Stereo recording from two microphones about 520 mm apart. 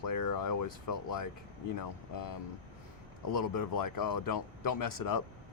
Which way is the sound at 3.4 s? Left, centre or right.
Left.